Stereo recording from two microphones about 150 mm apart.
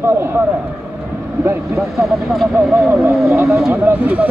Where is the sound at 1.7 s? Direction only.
Centre (ahead or behind).